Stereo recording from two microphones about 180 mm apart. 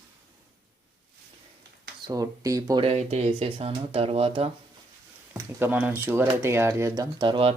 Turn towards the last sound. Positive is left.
turn(degrees=-30)  # may be behind; listen again after turning